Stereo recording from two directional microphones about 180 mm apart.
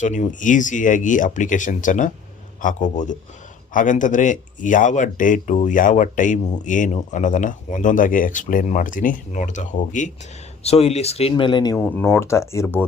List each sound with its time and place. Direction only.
0.0 s speech: 45° left (ahead or behind); by 11.8 s 25° left (ahead or behind)
11.8 s speech: 10° left (ahead or behind)